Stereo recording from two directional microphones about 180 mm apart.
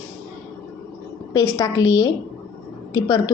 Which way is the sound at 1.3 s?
20° left (ahead or behind).